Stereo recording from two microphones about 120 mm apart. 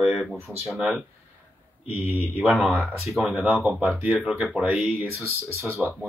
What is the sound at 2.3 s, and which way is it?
Speech, 10° right (ahead or behind).